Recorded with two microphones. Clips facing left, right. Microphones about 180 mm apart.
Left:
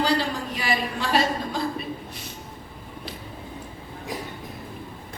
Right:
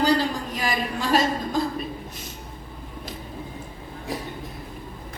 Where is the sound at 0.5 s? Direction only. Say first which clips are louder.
Even; 45° right (ahead or behind).